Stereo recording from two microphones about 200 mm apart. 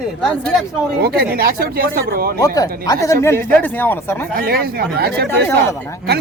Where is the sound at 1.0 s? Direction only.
50° right (ahead or behind).